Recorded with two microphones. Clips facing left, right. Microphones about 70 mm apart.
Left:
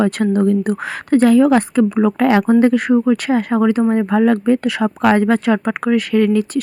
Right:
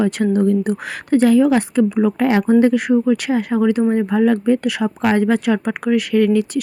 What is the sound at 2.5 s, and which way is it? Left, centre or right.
Speech, left.